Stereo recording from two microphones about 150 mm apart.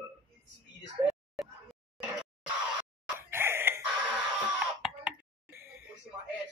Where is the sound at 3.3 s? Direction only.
15° right (ahead or behind).